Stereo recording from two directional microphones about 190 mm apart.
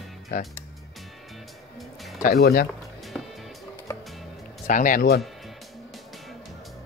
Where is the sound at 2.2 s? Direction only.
55° left (ahead or behind).